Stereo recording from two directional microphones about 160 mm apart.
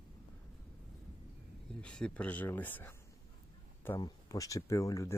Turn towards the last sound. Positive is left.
turn(degrees=20)  # may be behind; listen again after turning